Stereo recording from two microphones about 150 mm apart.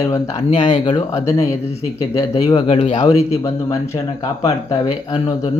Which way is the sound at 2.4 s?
30° left (ahead or behind).